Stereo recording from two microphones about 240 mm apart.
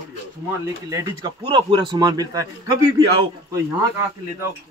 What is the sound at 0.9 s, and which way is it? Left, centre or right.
A man's voice, centre.